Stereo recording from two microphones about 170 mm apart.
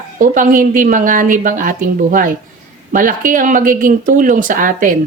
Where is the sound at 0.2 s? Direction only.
50° right (ahead or behind).